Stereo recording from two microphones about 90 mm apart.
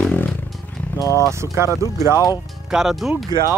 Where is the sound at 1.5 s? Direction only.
30° right (ahead or behind).